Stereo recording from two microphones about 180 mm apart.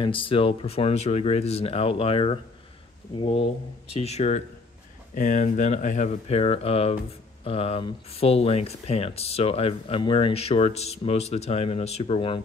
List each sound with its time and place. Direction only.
0.0 s speech: 30° left (ahead or behind)